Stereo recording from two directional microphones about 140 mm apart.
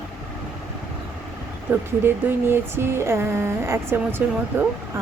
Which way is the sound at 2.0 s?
15° right (ahead or behind).